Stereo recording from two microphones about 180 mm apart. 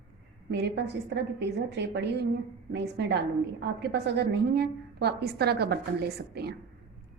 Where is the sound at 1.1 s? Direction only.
70° right (ahead or behind).